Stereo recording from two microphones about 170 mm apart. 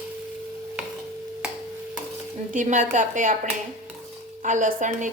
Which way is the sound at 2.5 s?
50° right (ahead or behind).